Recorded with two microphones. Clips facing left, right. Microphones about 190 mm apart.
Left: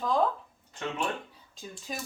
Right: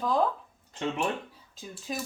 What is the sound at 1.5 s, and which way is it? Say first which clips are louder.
Speech: right 3 dB; centre (ahead or behind).